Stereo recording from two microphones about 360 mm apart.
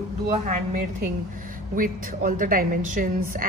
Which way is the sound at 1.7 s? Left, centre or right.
Right.